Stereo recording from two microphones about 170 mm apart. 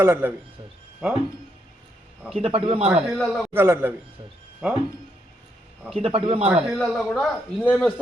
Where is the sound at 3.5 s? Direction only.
15° right (ahead or behind).